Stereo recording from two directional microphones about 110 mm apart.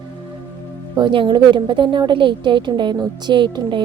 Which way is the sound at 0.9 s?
45° right (ahead or behind).